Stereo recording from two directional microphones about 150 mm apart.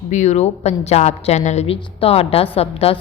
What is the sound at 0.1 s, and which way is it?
A woman's voice, 50° left (ahead or behind).